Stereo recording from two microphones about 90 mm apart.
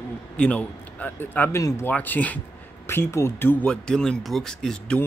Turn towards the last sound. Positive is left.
turn(degrees=5)  # may be behind; listen again after turning